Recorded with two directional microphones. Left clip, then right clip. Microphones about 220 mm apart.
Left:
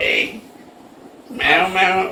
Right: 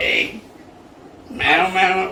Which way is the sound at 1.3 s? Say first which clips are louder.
Left 1 dB; 15° left (ahead or behind).